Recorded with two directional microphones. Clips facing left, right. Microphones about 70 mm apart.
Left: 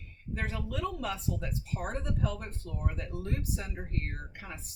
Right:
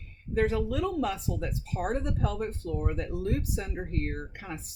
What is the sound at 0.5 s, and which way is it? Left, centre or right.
Speech, centre.